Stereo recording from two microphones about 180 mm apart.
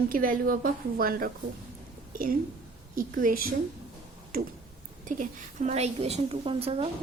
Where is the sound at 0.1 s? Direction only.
50° right (ahead or behind).